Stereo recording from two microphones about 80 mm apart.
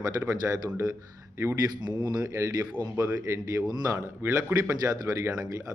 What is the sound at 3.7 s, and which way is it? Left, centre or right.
Speech, right.